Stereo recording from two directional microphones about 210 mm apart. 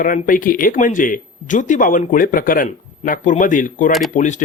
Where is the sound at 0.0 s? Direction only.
40° left (ahead or behind).